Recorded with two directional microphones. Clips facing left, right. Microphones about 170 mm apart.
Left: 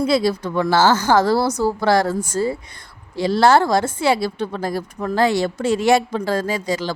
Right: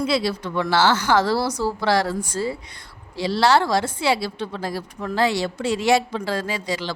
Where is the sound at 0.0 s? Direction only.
45° left (ahead or behind).